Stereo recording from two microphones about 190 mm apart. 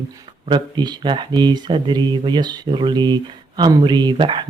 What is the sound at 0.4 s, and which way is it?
Speech, 25° right (ahead or behind).